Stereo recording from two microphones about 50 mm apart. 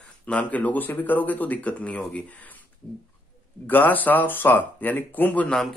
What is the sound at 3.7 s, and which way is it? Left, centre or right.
Speech, left.